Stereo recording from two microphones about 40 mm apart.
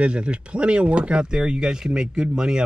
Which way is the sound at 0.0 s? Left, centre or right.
Right.